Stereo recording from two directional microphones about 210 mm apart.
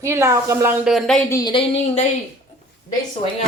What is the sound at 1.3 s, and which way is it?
Speech, 20° left (ahead or behind).